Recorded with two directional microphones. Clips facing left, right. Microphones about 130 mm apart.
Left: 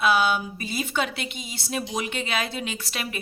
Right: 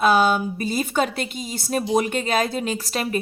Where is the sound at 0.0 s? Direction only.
40° right (ahead or behind).